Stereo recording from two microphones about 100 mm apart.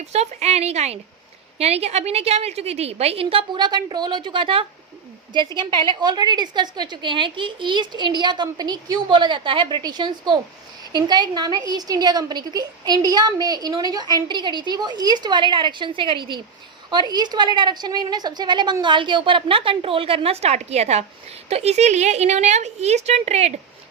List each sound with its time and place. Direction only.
0.0 s a woman's voice: 90° right; by 3.6 s 65° right (ahead or behind)
3.6 s a woman's voice: 45° right (ahead or behind); by 4.6 s 60° right (ahead or behind)
5.3 s a woman's voice: 50° right (ahead or behind); by 23.6 s 90° right